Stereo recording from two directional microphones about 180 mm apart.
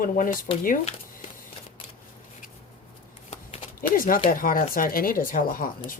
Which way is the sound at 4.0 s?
50° left (ahead or behind).